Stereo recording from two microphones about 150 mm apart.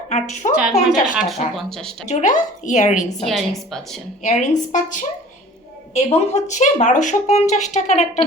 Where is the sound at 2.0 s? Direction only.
50° left (ahead or behind).